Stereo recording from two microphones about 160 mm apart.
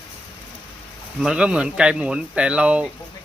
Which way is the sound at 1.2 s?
5° right (ahead or behind).